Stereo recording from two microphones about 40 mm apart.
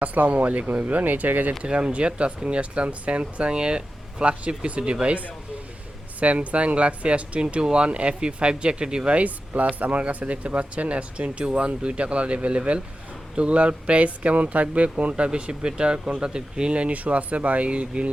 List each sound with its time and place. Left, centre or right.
0.0 s speech: right
1.6 s speech: right
9.1 s speech: right